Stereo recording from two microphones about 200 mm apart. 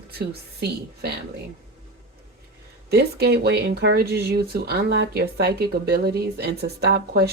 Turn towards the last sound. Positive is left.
turn(degrees=-55)  # may be behind; listen again after turning